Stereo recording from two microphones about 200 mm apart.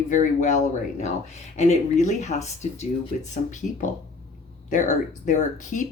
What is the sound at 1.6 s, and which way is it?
Speech, 35° left (ahead or behind).